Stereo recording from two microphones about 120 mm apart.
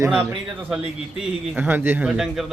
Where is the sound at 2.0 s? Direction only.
5° right (ahead or behind).